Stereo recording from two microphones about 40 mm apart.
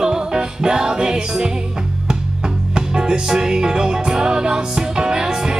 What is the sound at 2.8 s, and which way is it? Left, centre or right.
Music, right.